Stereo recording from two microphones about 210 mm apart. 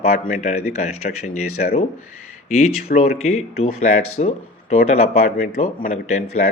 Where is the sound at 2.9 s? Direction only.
30° left (ahead or behind).